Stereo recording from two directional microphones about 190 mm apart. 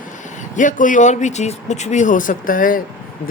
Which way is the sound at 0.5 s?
45° left (ahead or behind).